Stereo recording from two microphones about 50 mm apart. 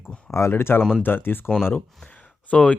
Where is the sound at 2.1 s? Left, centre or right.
Left.